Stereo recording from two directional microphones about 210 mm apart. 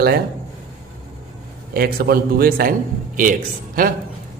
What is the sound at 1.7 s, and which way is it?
Speech, 45° right (ahead or behind).